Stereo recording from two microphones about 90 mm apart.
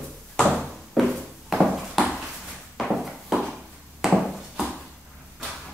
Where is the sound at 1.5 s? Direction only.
5° right (ahead or behind).